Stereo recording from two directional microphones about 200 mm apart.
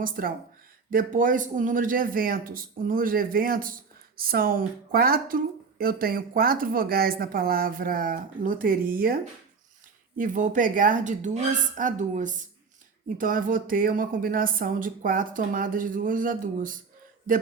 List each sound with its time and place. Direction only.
0.0 s a woman's voice: 45° right (ahead or behind)